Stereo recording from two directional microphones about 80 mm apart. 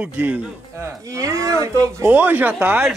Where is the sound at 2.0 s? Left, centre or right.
Right.